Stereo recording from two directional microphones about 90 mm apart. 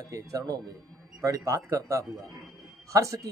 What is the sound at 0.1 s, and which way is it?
A man's voice, 35° right (ahead or behind).